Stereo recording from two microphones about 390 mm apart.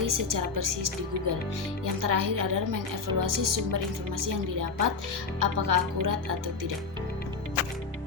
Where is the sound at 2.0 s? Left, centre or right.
Right.